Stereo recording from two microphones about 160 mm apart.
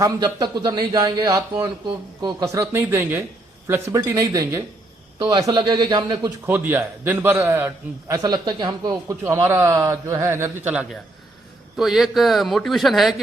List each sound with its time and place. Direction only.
0.0 s a man's voice: 20° right (ahead or behind)
6.4 s a man's voice: 15° right (ahead or behind)